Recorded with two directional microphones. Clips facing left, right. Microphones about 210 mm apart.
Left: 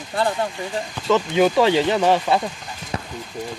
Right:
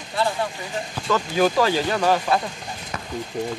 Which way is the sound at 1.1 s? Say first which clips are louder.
Left 3 dB; 20° left (ahead or behind).